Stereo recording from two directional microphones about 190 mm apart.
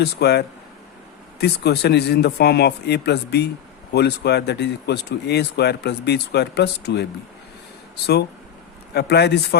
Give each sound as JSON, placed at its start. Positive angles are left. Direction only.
{"t": 0.0, "sound": "speech", "side_deg": 60}
{"t": 8.9, "sound": "speech", "side_deg": 60}